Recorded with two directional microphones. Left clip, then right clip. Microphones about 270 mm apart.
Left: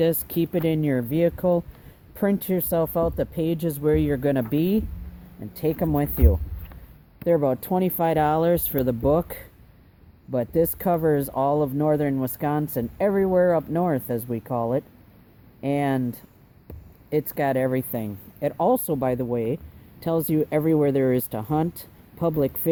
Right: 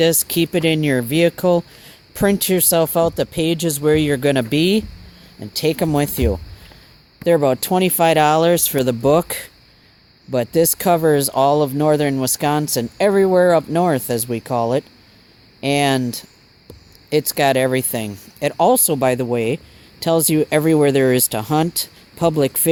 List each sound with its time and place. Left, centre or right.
0.0 s speech: right